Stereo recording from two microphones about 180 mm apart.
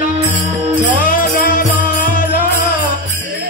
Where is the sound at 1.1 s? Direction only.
50° left (ahead or behind).